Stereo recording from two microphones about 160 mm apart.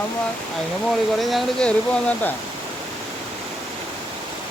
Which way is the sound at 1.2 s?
Centre (ahead or behind).